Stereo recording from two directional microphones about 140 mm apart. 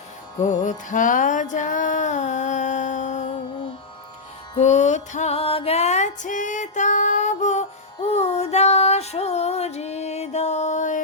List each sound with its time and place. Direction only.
0.4 s music: 65° left (ahead or behind)
4.5 s music: 55° left (ahead or behind)
8.1 s female singing: 50° left (ahead or behind)